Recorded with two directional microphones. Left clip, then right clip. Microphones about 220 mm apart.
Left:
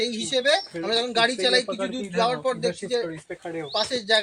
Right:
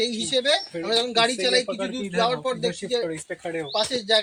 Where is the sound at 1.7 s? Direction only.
50° right (ahead or behind).